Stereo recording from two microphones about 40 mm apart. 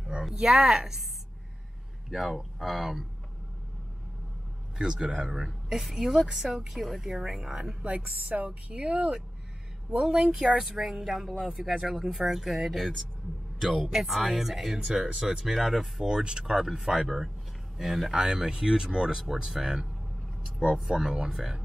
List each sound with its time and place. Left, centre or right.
0.2 s speech: centre
2.0 s speech: centre
4.7 s speech: right
7.8 s speech: right; by 10.3 s centre
10.6 s speech: centre
11.7 s speech: centre
12.1 s speech: centre
15.5 s speech: centre
16.1 s speech: centre
20.4 s vehicle: centre
20.9 s speech: centre